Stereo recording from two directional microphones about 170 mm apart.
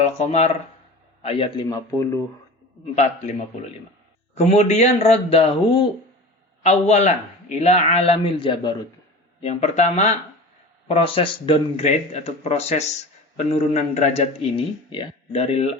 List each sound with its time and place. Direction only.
0.0 s a man's voice: 40° left (ahead or behind)
2.9 s a man's voice: 40° left (ahead or behind)
4.4 s a man's voice: 40° left (ahead or behind)
9.4 s a man's voice: 40° left (ahead or behind)